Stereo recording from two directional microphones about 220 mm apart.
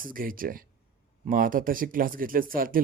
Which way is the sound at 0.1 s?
40° right (ahead or behind).